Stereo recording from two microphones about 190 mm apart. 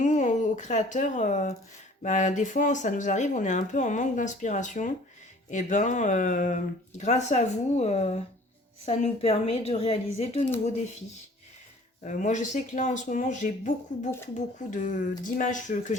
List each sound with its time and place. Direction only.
0.0 s speech: 40° left (ahead or behind)
12.0 s speech: 40° left (ahead or behind)